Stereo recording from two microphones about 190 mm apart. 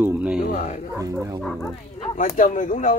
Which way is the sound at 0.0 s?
10° right (ahead or behind).